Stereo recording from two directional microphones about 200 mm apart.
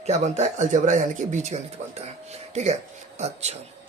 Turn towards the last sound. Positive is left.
turn(degrees=-30)  # may be behind; listen again after turning